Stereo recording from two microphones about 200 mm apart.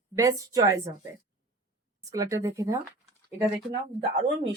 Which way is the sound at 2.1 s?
15° right (ahead or behind).